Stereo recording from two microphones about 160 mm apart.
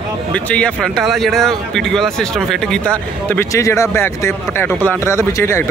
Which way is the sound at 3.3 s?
15° left (ahead or behind).